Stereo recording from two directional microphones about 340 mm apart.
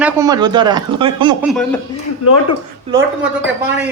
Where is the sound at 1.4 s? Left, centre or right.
Centre.